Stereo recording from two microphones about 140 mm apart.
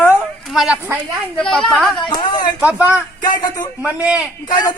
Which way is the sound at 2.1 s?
30° left (ahead or behind).